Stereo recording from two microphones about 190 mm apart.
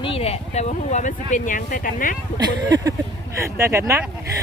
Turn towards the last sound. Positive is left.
turn(degrees=-15)  # may be behind; listen again after turning